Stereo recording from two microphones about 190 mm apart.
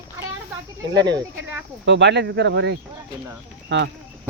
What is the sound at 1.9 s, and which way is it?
Speech, 65° right (ahead or behind).